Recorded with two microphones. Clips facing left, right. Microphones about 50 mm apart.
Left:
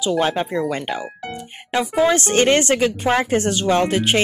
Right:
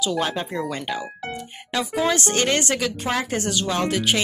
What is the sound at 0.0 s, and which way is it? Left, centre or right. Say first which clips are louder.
Speech: left 5 dB; left.